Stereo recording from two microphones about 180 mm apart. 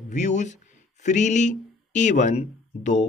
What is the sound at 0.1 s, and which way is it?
Speech, 40° left (ahead or behind).